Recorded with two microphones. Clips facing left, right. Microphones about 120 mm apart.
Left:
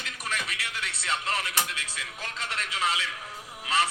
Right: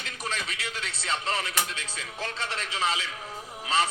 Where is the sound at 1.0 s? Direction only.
25° right (ahead or behind).